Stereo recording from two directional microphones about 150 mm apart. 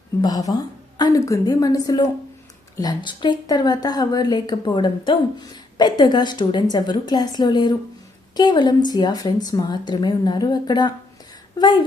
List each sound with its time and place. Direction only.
0.2 s a woman's voice: 25° left (ahead or behind)